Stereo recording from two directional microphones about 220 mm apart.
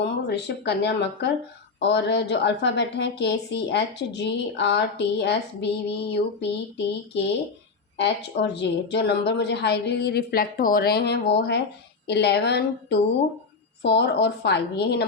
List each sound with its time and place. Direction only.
0.0 s a woman's voice: 50° left (ahead or behind)